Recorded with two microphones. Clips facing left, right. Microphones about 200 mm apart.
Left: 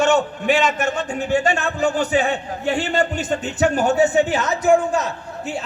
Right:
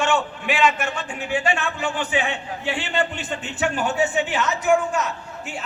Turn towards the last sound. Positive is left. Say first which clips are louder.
# left 4 dB
turn(degrees=35)  # may be behind; listen again after turning